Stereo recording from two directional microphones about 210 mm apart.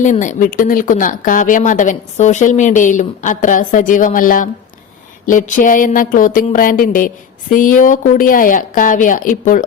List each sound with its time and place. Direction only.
0.0 s a woman's voice: 35° left (ahead or behind)